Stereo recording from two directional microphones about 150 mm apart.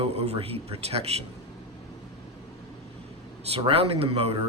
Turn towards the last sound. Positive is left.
turn(degrees=-40)  # may be behind; listen again after turning